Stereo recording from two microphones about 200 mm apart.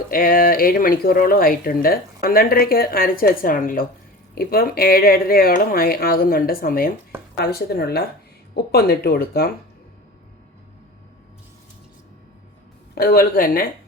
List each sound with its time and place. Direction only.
0.1 s speech: 45° left (ahead or behind)
12.9 s speech: 50° left (ahead or behind)